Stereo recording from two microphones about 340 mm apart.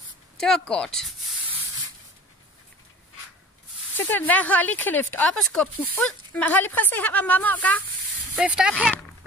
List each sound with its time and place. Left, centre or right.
0.4 s speech: centre
3.9 s speech: centre